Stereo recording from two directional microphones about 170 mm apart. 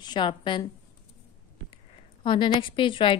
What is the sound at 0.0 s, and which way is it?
Speech, 25° left (ahead or behind).